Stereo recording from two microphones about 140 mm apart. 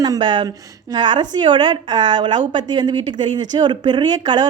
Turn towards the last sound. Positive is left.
turn(degrees=-30)  # may be behind; listen again after turning